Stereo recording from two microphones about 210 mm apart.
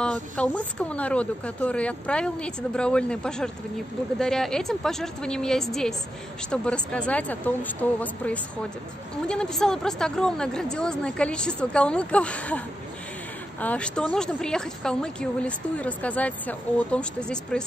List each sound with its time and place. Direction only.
0.0 s speech: 5° left (ahead or behind)